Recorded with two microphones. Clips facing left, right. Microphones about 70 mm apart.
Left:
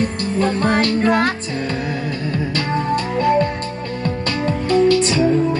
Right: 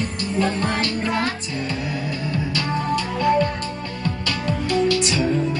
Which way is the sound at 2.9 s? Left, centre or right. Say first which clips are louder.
Left 3 dB; left.